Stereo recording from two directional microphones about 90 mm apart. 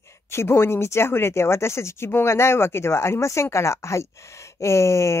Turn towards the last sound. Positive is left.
turn(degrees=30)  # may be behind; listen again after turning